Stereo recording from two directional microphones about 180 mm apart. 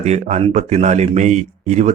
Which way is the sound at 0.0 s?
40° right (ahead or behind).